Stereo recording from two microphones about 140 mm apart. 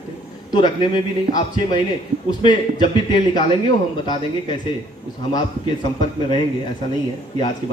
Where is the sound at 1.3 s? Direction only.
35° left (ahead or behind).